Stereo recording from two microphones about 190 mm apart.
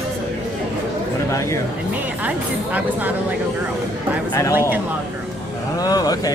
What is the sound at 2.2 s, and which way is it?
Speech, 5° right (ahead or behind).